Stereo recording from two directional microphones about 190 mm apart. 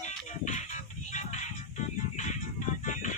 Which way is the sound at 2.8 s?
40° left (ahead or behind).